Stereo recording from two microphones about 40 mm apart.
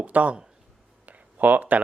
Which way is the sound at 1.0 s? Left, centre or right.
Right.